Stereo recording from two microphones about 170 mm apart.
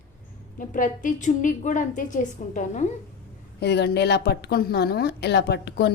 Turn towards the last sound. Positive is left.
turn(degrees=75)  # may be behind; listen again after turning